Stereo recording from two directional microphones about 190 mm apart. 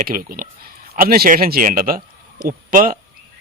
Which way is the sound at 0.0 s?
50° right (ahead or behind).